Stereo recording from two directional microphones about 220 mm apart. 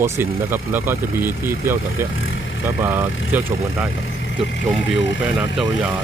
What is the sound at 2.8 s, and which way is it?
Speech, 10° right (ahead or behind).